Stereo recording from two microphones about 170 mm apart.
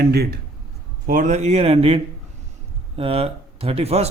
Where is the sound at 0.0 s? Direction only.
70° right (ahead or behind).